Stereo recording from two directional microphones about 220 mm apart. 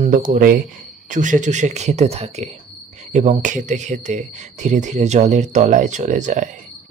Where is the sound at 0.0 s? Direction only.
35° right (ahead or behind).